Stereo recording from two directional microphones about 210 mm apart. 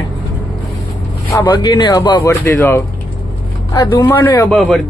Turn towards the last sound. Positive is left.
turn(degrees=5)  # may be behind; listen again after turning